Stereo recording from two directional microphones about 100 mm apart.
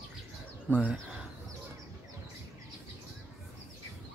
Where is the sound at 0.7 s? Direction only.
25° right (ahead or behind).